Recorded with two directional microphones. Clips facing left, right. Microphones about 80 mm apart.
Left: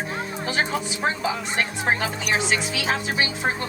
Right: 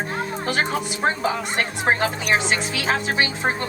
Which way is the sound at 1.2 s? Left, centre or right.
Right.